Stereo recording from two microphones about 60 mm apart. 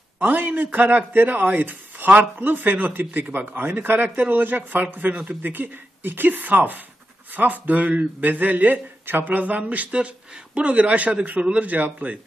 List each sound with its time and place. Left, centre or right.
0.2 s speech: right